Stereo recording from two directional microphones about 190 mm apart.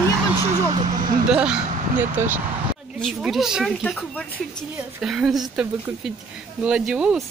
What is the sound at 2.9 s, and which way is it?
Speech, centre (ahead or behind).